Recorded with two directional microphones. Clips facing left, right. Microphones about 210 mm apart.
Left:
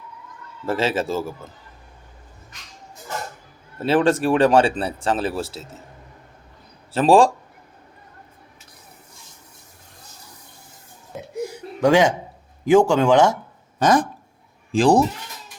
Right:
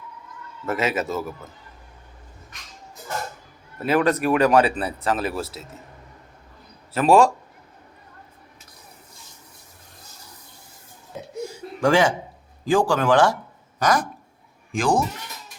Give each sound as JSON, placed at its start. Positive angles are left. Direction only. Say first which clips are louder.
{"t": 0.6, "sound": "speech", "louder": "left 2 dB", "side_deg": 30}
{"t": 3.8, "sound": "speech", "louder": "left 2 dB", "side_deg": 30}
{"t": 6.9, "sound": "speech", "louder": "left 2 dB", "side_deg": 30}
{"t": 11.3, "sound": "a sound", "louder": "left 3 dB", "side_deg": 20}
{"t": 12.6, "sound": "speech", "louder": "left 5 dB", "side_deg": 20}
{"t": 13.7, "sound": "a sound", "louder": "left 4 dB", "side_deg": 30}
{"t": 14.7, "sound": "speech", "louder": "left 6 dB", "side_deg": 35}